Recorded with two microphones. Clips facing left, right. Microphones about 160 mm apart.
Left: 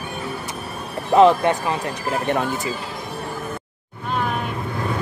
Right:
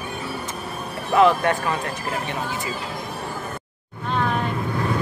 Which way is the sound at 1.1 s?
25° left (ahead or behind).